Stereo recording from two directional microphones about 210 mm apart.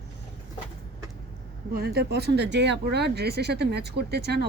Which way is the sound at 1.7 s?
50° right (ahead or behind).